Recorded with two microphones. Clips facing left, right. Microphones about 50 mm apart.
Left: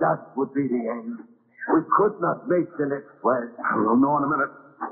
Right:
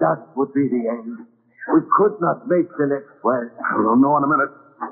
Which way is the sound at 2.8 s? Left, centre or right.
Right.